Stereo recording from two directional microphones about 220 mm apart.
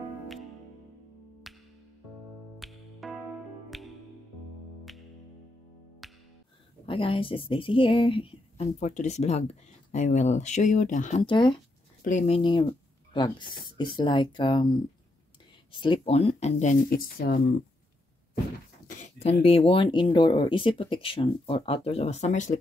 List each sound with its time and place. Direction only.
1.5 s music: centre (ahead or behind)
6.0 s music: centre (ahead or behind)
6.9 s a woman's voice: 25° left (ahead or behind)
15.7 s speech: 20° left (ahead or behind); by 17.4 s 40° left (ahead or behind)
18.9 s a woman's voice: 35° left (ahead or behind)